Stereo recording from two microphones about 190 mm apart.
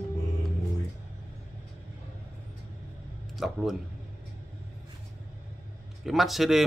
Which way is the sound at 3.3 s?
Centre (ahead or behind).